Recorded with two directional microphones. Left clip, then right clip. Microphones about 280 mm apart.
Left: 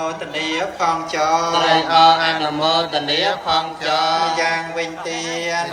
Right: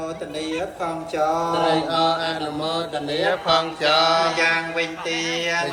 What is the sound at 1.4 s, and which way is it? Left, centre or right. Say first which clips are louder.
Mantra: left 4 dB; left.